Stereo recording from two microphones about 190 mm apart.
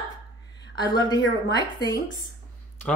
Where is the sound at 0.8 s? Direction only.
20° left (ahead or behind).